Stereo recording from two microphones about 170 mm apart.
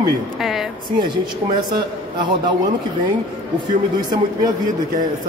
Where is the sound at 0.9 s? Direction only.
25° right (ahead or behind).